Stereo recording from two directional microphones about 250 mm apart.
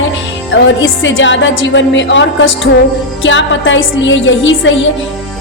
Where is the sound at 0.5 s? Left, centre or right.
Left.